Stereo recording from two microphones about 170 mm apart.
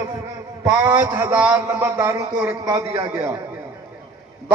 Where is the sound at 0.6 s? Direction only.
20° right (ahead or behind).